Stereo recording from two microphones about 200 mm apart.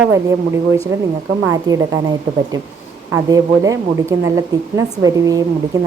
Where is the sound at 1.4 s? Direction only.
15° right (ahead or behind).